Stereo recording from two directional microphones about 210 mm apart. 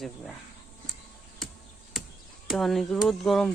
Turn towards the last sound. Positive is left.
turn(degrees=0)  # may be behind; listen again after turning